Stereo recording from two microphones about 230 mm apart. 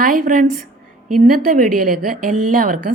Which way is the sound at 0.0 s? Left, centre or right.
Right.